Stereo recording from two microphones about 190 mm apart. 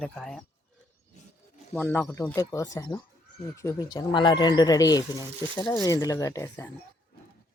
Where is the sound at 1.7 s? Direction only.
10° left (ahead or behind).